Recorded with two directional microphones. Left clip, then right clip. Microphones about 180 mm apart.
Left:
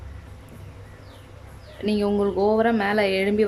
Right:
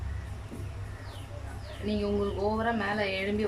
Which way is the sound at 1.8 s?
45° left (ahead or behind).